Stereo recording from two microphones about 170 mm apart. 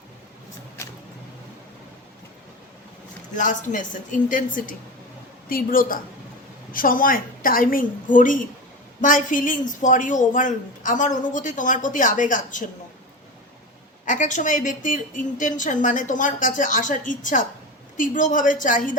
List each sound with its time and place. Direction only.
3.3 s a woman's voice: 50° left (ahead or behind)
14.0 s a woman's voice: 50° left (ahead or behind)